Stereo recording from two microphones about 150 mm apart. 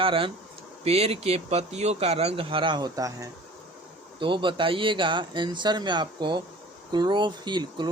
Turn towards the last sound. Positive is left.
turn(degrees=-30)  # may be behind; listen again after turning